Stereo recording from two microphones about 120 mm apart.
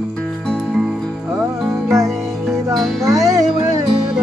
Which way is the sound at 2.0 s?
Centre (ahead or behind).